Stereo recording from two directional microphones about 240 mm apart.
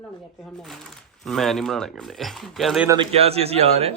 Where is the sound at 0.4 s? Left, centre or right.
Centre.